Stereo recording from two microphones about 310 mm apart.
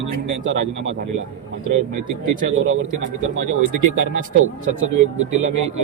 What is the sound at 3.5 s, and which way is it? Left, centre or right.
Speech, right.